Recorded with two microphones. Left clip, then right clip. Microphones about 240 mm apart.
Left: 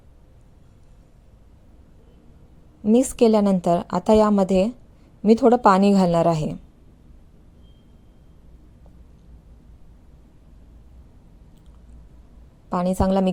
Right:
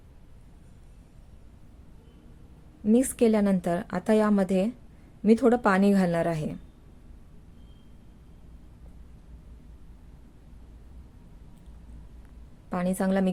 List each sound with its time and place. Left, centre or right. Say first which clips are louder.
2.8 s a woman's voice: left 6 dB; centre
12.7 s a woman's voice: left 6 dB; centre